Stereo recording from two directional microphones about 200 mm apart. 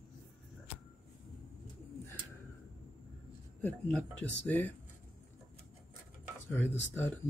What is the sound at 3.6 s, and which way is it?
Speech, 5° left (ahead or behind).